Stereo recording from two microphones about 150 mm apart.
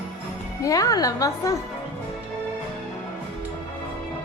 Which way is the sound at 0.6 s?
25° left (ahead or behind).